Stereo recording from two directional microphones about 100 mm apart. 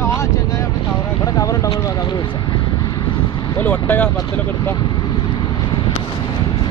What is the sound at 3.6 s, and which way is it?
Speech, 15° left (ahead or behind).